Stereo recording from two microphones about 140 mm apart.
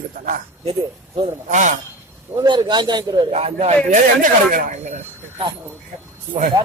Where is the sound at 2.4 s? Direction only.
30° right (ahead or behind).